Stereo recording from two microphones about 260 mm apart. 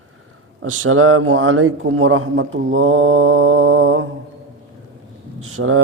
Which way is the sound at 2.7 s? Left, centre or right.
Right.